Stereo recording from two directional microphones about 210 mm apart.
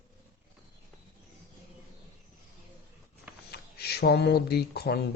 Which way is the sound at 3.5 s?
50° left (ahead or behind).